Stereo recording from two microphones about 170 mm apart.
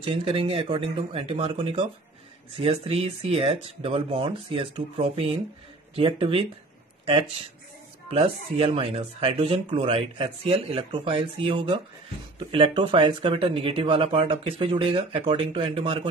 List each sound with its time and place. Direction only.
0.0 s speech: 35° right (ahead or behind)